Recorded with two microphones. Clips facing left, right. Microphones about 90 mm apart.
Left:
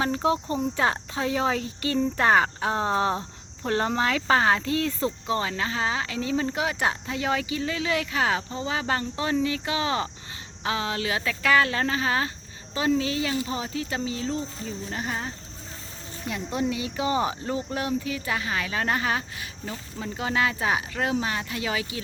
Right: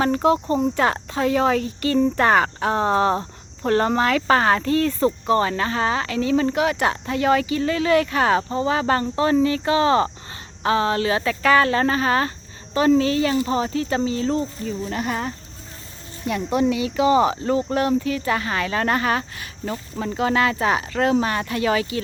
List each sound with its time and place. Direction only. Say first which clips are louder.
0.0 s speech: right 6 dB; 65° right (ahead or behind)
14.8 s speech: right 5 dB; 85° right
16.2 s speech: right 7 dB; 65° right (ahead or behind)